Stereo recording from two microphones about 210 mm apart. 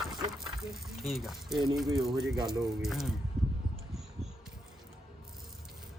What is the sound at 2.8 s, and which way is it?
Speech, centre (ahead or behind).